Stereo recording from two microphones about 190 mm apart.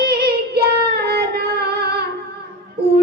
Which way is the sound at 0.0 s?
60° right (ahead or behind).